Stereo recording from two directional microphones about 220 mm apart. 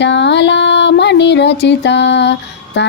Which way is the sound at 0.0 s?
55° left (ahead or behind).